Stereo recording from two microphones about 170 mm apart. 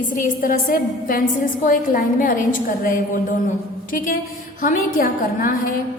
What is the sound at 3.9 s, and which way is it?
A woman's voice, 55° left (ahead or behind).